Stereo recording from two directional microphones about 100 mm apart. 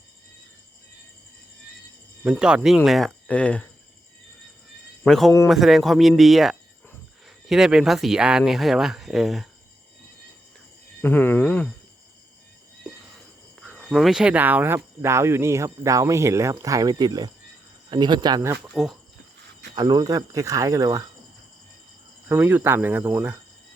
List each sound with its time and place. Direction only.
2.2 s speech: 10° right (ahead or behind)
3.2 s speech: 10° left (ahead or behind)
5.0 s speech: 5° left (ahead or behind)
11.0 s speech: 20° left (ahead or behind)
12.8 s a sound: centre (ahead or behind)
13.8 s speech: centre (ahead or behind); by 18.4 s 45° right (ahead or behind)
18.6 s speech: centre (ahead or behind)
19.7 s speech: 40° right (ahead or behind)
22.3 s speech: 20° right (ahead or behind)